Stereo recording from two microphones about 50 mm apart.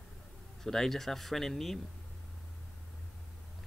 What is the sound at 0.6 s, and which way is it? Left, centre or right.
Speech, centre.